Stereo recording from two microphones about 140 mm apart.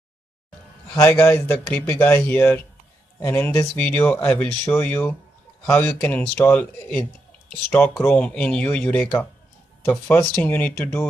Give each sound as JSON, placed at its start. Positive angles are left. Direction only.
{"t": 0.9, "sound": "a man's voice", "side_deg": 15}